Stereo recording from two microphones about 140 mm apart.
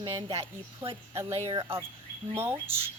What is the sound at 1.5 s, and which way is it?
Speech, 40° right (ahead or behind).